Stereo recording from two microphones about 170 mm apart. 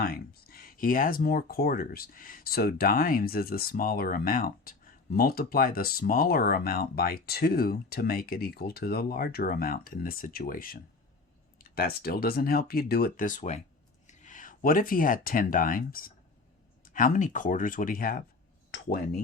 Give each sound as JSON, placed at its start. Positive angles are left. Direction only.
{"t": 0.0, "sound": "speech", "side_deg": 65}